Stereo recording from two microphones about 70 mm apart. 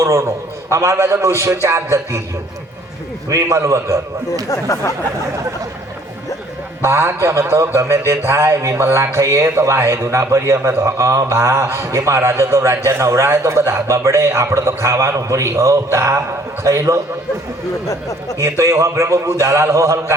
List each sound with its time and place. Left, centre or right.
0.0 s a man's voice: right
3.2 s a man's voice: right
4.4 s speech: left
6.8 s a man's voice: right
18.4 s a man's voice: right